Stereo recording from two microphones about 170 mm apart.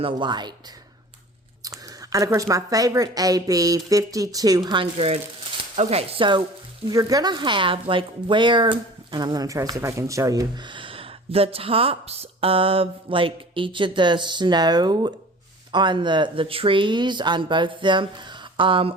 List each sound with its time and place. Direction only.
0.0 s speech: 25° right (ahead or behind)
1.6 s speech: 20° right (ahead or behind)